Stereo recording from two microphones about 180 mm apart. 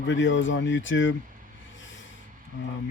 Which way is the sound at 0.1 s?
90° left.